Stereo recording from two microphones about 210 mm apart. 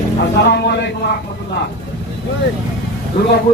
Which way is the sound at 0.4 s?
55° left (ahead or behind).